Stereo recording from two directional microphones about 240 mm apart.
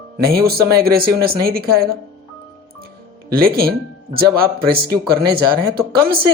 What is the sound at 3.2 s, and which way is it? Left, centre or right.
Speech, right.